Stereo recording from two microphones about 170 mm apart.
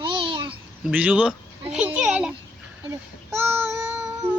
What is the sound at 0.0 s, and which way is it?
Babbling, 30° right (ahead or behind).